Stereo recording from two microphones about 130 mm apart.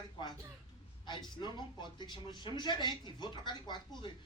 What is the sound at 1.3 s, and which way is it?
A woman's voice, 35° left (ahead or behind).